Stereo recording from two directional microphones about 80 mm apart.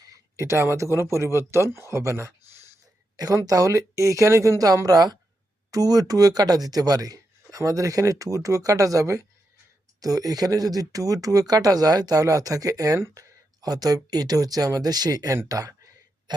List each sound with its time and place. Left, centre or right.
0.3 s speech: right
3.2 s speech: right